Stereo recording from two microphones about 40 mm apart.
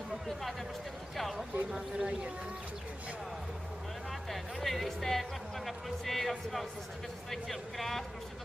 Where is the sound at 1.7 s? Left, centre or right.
Centre.